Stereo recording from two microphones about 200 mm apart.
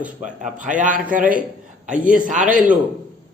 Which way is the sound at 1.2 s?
5° right (ahead or behind).